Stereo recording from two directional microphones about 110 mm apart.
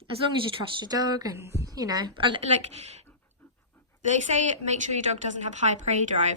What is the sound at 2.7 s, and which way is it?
Speech, 80° right.